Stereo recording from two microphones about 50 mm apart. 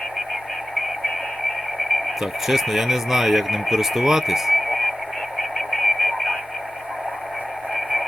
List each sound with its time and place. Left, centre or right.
2.2 s speech: centre
5.4 s radio: centre